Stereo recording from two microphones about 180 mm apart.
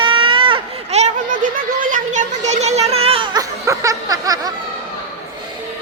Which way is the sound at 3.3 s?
15° right (ahead or behind).